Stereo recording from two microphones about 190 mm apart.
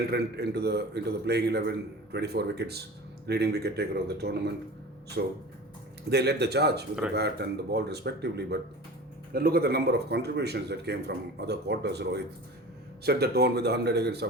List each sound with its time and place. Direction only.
0.1 s speech: 60° right (ahead or behind)